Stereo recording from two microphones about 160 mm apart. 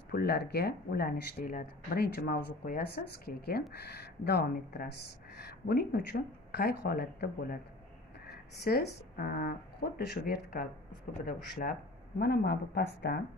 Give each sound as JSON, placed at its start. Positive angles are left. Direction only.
{"t": 0.1, "sound": "speech", "side_deg": 80}
{"t": 3.7, "sound": "speech", "side_deg": 90}
{"t": 12.2, "sound": "speech", "side_deg": 85}